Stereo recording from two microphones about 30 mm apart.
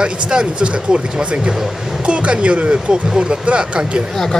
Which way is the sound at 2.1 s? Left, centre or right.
Right.